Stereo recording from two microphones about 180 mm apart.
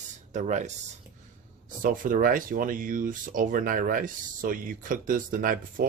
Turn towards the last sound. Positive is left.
turn(degrees=-50)  # may be behind; listen again after turning